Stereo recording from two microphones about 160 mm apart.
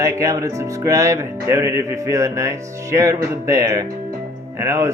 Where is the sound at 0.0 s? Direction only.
20° right (ahead or behind).